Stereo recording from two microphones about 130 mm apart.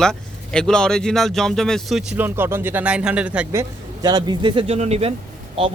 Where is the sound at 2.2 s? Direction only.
15° right (ahead or behind).